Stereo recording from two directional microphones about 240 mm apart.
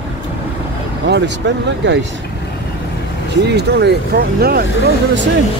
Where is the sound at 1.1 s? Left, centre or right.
Right.